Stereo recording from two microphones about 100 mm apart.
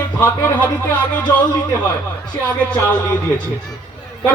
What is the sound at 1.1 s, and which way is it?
Speech, 15° left (ahead or behind).